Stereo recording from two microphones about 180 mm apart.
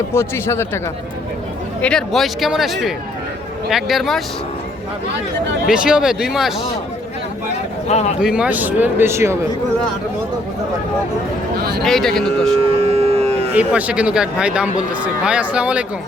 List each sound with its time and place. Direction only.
0.1 s speech: 15° left (ahead or behind)
1.8 s speech: 5° left (ahead or behind)
5.7 s speech: 5° right (ahead or behind)
7.9 s speech: 35° left (ahead or behind)
8.2 s speech: 5° right (ahead or behind)
11.8 s speech: centre (ahead or behind)
12.7 s civil defense siren: 35° right (ahead or behind)
13.5 s speech: 10° right (ahead or behind)